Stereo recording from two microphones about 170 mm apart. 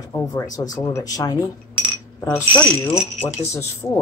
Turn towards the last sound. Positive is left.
turn(degrees=15)  # may be behind; listen again after turning